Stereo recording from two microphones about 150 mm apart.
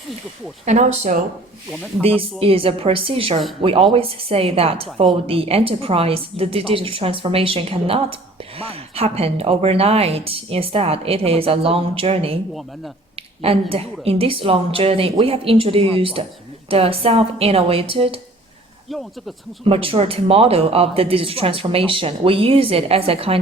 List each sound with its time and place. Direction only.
0.6 s speech: 50° right (ahead or behind)
1.7 s speech: 10° left (ahead or behind)
2.0 s speech: 40° right (ahead or behind)
19.6 s speech: 35° right (ahead or behind)